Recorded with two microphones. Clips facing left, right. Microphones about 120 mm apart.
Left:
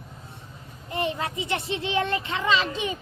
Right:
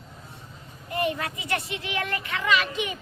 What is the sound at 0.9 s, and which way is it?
A child's voice, 25° left (ahead or behind).